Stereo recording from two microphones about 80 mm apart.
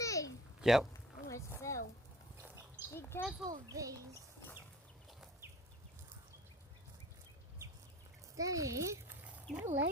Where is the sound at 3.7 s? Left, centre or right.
Right.